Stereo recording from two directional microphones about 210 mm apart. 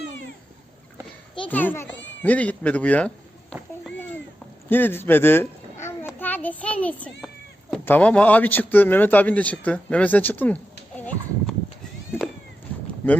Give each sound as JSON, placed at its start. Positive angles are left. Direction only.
{"t": 1.5, "sound": "a man's voice", "side_deg": 10}
{"t": 3.5, "sound": "a sound", "side_deg": 0}
{"t": 4.7, "sound": "a child's voice", "side_deg": 10}